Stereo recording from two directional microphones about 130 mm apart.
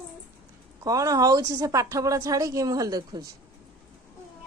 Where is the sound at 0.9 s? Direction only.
25° right (ahead or behind).